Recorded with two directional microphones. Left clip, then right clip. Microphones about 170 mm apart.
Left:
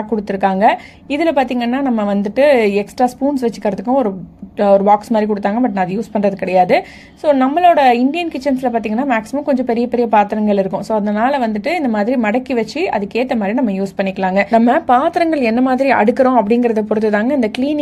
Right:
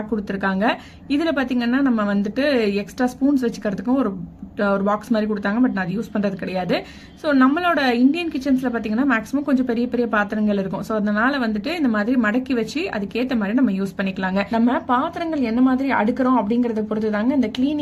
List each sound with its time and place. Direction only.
0.3 s a woman's voice: 30° left (ahead or behind)
14.5 s speech: 40° left (ahead or behind)